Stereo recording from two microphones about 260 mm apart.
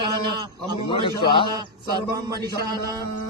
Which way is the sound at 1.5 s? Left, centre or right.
Centre.